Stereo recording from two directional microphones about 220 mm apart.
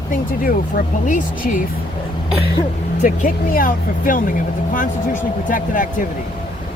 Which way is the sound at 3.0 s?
40° left (ahead or behind).